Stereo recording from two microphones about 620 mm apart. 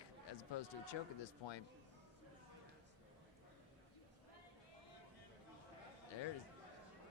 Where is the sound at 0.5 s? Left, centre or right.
Left.